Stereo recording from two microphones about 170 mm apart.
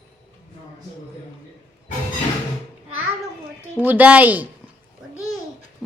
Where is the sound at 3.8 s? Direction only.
10° right (ahead or behind).